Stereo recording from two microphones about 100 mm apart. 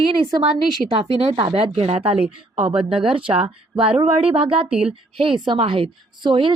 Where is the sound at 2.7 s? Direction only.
10° right (ahead or behind).